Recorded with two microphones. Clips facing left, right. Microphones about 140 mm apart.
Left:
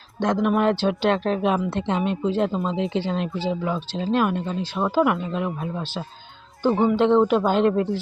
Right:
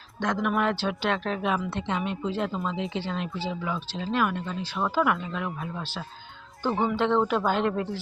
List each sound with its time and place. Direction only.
0.2 s speech: 25° left (ahead or behind)
6.6 s speech: 15° left (ahead or behind)